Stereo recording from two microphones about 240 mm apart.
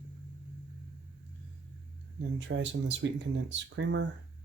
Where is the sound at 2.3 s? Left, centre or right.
Right.